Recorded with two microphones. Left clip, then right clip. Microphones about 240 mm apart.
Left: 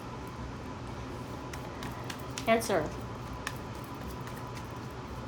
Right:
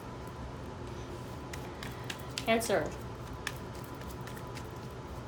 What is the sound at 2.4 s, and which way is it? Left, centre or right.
Speech, left.